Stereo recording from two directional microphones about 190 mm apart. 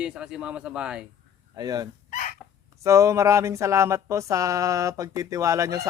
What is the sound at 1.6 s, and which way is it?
Speech, 20° right (ahead or behind).